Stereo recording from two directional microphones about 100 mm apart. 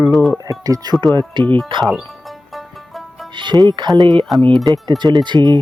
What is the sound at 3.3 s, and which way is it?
Speech, 50° right (ahead or behind).